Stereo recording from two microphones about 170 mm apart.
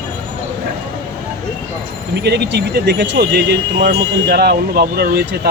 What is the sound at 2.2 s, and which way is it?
Speech, 75° right (ahead or behind).